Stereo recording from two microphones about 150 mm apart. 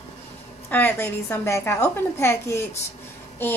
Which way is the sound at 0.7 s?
15° left (ahead or behind).